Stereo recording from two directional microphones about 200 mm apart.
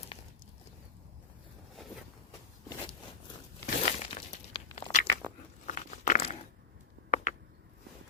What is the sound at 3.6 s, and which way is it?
Crumpling, 40° left (ahead or behind).